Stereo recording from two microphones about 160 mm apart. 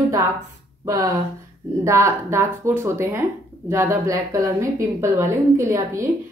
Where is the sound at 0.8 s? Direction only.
20° right (ahead or behind).